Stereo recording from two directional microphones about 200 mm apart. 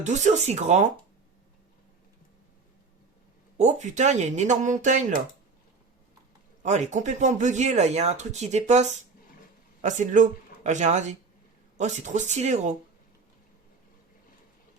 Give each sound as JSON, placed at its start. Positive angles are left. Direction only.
{"t": 0.0, "sound": "speech", "side_deg": -35}
{"t": 3.6, "sound": "speech", "side_deg": -35}
{"t": 6.6, "sound": "speech", "side_deg": -35}